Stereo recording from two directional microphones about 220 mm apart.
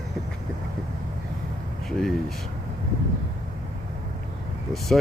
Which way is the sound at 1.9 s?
Centre (ahead or behind).